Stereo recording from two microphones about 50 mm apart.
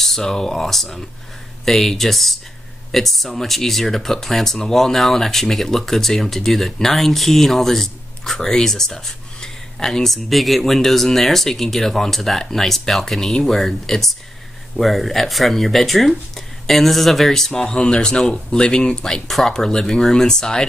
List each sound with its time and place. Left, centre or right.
0.0 s speech: centre
19.2 s speech: centre